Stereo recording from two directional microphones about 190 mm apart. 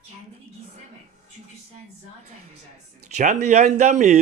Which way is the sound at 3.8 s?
35° right (ahead or behind).